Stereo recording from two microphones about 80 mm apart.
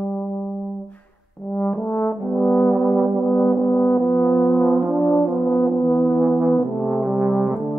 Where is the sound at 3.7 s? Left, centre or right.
Left.